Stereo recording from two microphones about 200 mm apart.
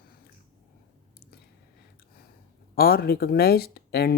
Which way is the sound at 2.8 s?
50° left (ahead or behind).